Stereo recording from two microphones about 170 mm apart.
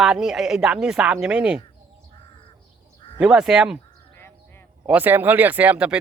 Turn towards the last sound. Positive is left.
turn(degrees=-5)  # may be behind; listen again after turning